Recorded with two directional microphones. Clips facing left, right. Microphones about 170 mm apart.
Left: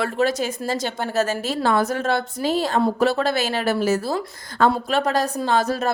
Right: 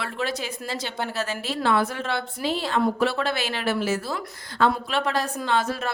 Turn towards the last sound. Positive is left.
turn(degrees=40)  # may be behind; listen again after turning